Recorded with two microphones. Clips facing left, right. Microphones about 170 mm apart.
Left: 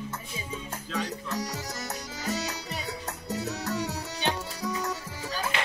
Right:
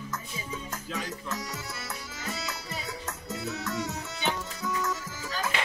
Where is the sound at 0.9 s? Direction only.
35° left (ahead or behind).